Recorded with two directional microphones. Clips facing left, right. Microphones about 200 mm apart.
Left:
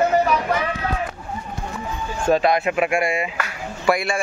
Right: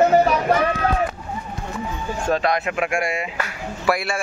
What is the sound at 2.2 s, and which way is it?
A man's voice, 5° left (ahead or behind).